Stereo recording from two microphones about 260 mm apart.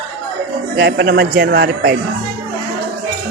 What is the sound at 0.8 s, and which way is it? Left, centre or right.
A man's voice, right.